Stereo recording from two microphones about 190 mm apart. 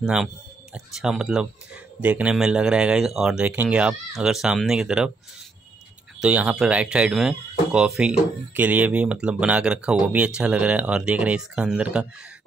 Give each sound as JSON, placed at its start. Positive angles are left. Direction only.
{"t": 0.0, "sound": "speech", "side_deg": -5}
{"t": 6.1, "sound": "speech", "side_deg": -5}